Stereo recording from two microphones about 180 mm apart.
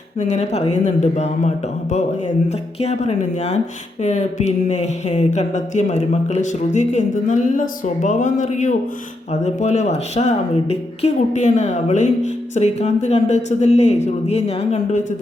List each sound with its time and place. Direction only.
0.2 s speech: 35° left (ahead or behind)